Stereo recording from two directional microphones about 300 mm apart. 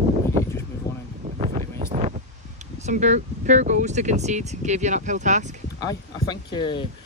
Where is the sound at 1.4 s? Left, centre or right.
Right.